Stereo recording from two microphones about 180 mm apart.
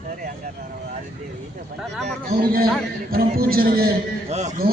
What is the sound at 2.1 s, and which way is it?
A man's voice, 55° right (ahead or behind).